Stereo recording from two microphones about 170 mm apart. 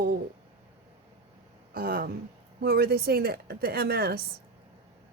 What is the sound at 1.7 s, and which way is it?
A woman's voice, 60° right (ahead or behind).